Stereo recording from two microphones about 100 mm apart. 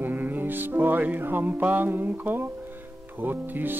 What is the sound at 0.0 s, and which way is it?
Music, 20° right (ahead or behind).